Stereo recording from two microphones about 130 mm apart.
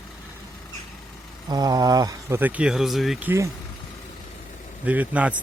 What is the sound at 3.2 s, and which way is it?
Speech, 15° right (ahead or behind).